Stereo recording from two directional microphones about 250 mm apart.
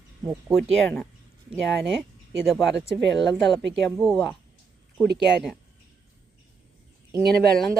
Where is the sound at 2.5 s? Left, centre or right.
Centre.